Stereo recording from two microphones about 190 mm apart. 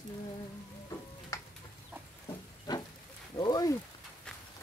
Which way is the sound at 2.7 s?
20° left (ahead or behind).